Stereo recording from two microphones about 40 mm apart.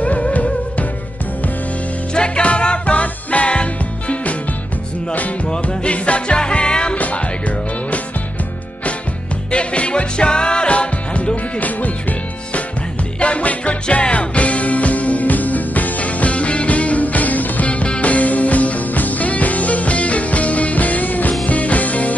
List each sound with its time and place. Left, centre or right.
0.0 s music: left
2.1 s music: left
5.5 s music: left
7.0 s music: left
9.5 s music: left